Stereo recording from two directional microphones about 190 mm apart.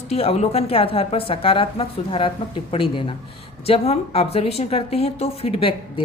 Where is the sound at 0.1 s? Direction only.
30° left (ahead or behind).